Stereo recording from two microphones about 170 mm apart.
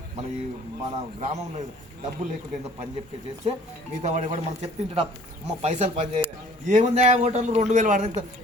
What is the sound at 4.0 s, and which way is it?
A man's voice, 40° right (ahead or behind).